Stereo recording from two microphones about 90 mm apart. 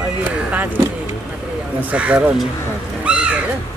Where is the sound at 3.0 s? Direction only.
15° right (ahead or behind).